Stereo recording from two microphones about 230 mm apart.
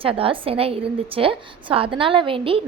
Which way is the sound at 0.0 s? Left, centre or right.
Right.